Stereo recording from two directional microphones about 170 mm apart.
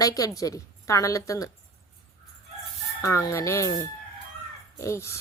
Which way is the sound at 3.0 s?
20° left (ahead or behind).